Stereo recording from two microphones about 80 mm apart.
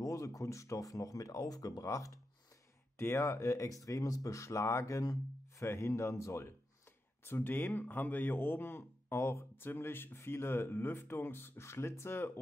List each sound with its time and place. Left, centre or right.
0.0 s speech: left
7.2 s speech: left